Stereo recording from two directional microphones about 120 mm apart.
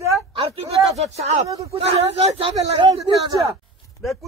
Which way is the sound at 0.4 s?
50° right (ahead or behind).